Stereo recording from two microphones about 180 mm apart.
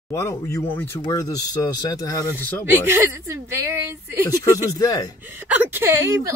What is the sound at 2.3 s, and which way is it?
Speech, 10° right (ahead or behind).